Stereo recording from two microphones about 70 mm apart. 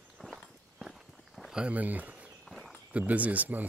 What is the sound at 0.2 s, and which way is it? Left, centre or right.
Walk, centre.